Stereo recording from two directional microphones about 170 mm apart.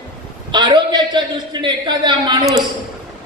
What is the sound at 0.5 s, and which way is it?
A man's voice, 25° right (ahead or behind).